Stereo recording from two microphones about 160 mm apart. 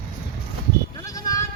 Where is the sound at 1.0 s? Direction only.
20° left (ahead or behind).